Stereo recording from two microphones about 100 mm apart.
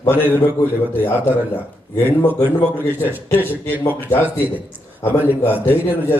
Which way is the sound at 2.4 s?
20° left (ahead or behind).